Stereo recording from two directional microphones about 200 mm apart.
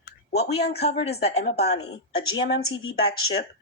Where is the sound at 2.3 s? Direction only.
90° left.